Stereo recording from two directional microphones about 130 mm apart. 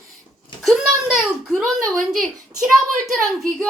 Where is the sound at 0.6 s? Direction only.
Centre (ahead or behind).